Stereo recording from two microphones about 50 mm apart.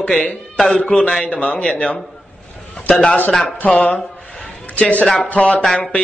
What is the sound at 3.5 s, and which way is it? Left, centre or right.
A man's voice, left.